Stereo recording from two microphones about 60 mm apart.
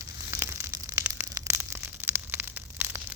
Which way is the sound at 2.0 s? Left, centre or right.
Right.